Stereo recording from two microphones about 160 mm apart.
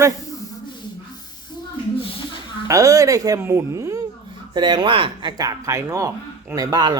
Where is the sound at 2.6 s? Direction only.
20° right (ahead or behind).